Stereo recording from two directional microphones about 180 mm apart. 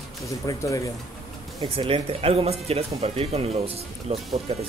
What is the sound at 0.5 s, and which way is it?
Speech, 15° left (ahead or behind).